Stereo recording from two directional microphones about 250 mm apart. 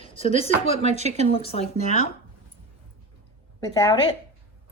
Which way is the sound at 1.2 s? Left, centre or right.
Left.